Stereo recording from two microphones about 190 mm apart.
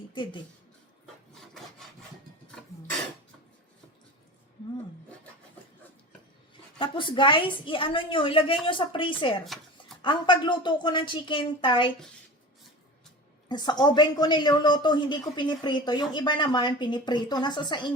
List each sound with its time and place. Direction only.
0.1 s speech: 25° left (ahead or behind)
6.7 s a woman's voice: 25° left (ahead or behind)
9.5 s speech: centre (ahead or behind)
10.0 s a woman's voice: 25° left (ahead or behind)
13.5 s a woman's voice: 20° left (ahead or behind)